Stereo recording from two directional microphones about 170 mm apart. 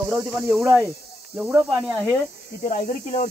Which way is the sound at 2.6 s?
55° left (ahead or behind).